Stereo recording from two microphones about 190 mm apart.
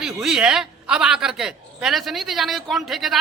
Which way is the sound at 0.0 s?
5° right (ahead or behind).